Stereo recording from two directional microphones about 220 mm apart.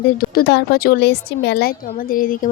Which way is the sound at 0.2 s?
45° left (ahead or behind).